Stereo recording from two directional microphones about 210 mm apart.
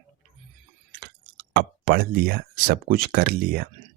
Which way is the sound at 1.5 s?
45° right (ahead or behind).